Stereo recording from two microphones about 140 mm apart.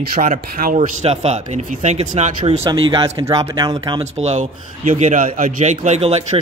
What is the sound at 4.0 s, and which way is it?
A man's voice, 50° right (ahead or behind).